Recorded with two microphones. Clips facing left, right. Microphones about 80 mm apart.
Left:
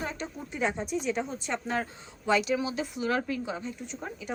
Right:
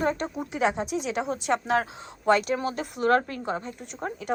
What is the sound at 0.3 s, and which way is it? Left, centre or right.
A woman's voice, right.